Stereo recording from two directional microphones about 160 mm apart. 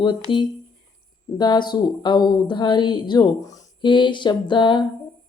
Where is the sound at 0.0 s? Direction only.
30° left (ahead or behind).